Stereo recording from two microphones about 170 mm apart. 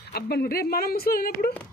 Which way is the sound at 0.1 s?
65° left (ahead or behind).